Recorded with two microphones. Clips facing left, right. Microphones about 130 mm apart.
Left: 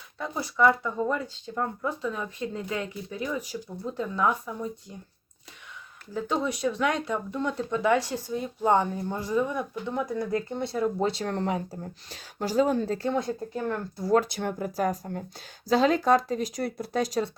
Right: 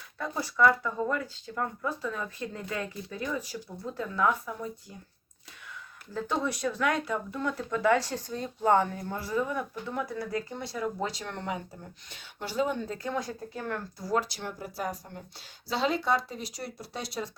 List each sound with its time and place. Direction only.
0.2 s speech: 15° left (ahead or behind)
6.1 s speech: 15° left (ahead or behind)
14.1 s speech: 55° left (ahead or behind)